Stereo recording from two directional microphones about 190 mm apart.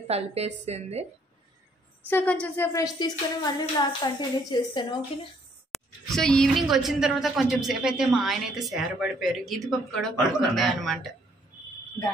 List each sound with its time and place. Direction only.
0.1 s a woman's voice: 35° right (ahead or behind)
2.0 s a sound: 10° left (ahead or behind)
4.0 s speech: 20° left (ahead or behind)
6.0 s a woman's voice: centre (ahead or behind)